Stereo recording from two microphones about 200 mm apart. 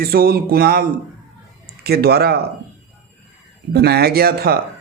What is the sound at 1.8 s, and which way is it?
Speech, 50° right (ahead or behind).